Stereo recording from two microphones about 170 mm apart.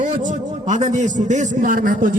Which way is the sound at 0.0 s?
45° right (ahead or behind).